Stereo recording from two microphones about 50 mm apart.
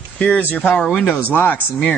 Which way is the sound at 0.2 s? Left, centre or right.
Left.